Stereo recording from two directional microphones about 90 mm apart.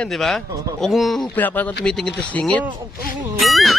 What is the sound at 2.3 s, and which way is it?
Speech, 15° left (ahead or behind).